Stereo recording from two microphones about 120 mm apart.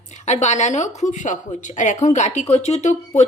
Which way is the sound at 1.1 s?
90° left.